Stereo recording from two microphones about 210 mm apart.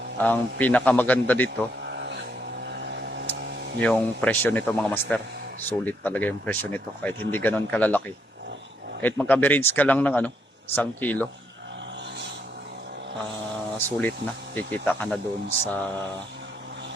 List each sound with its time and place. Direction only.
0.2 s speech: 5° left (ahead or behind)
1.9 s vehicle: 55° right (ahead or behind)
2.6 s a sound: 55° right (ahead or behind)
3.8 s speech: 5° left (ahead or behind)
13.7 s speech: 10° left (ahead or behind)